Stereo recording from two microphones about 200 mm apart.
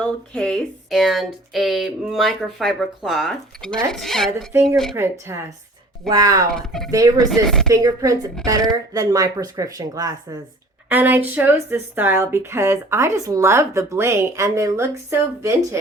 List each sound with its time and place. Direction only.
0.0 s speech: 5° left (ahead or behind)
5.2 s speech: 15° right (ahead or behind)
6.5 s speech: centre (ahead or behind)
6.9 s speech: 15° right (ahead or behind)
7.3 s speech: centre (ahead or behind)
7.7 s speech: 15° right (ahead or behind)